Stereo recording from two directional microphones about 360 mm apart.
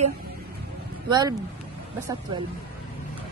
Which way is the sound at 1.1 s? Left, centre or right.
Centre.